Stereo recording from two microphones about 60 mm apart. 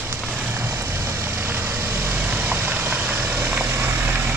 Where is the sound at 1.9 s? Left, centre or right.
Right.